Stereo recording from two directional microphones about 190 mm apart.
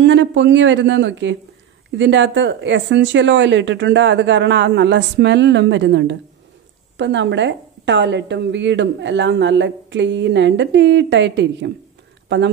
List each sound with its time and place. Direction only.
0.0 s a woman's voice: 75° right (ahead or behind)